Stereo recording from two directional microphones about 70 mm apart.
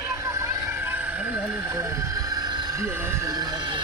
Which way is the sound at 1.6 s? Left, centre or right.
Right.